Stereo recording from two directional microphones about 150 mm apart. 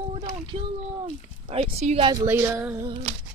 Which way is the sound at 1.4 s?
45° right (ahead or behind).